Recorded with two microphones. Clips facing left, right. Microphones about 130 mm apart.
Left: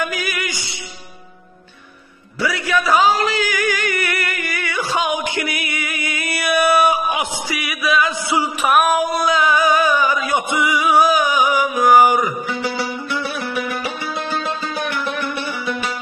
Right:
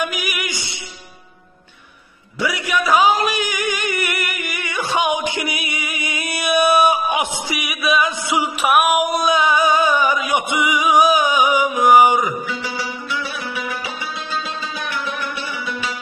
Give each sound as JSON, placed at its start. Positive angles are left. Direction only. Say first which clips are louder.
{"t": 0.0, "sound": "music", "louder": "left 1 dB", "side_deg": -15}
{"t": 2.4, "sound": "male singing", "louder": "left 1 dB", "side_deg": -15}
{"t": 10.3, "sound": "music", "louder": "even", "side_deg": -15}
{"t": 12.4, "sound": "music", "louder": "left 3 dB", "side_deg": 60}